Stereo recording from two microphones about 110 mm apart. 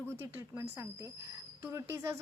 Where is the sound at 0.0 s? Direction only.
20° right (ahead or behind).